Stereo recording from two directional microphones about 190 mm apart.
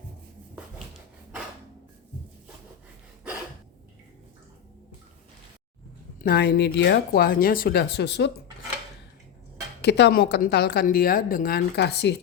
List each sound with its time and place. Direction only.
6.2 s a woman's voice: 55° left (ahead or behind)
9.8 s a woman's voice: 60° left (ahead or behind)